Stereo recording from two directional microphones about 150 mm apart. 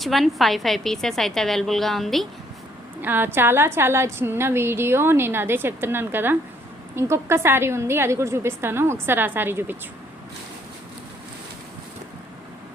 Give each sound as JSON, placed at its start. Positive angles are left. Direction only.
{"t": 0.0, "sound": "a woman's voice", "side_deg": 0}
{"t": 3.0, "sound": "a woman's voice", "side_deg": -15}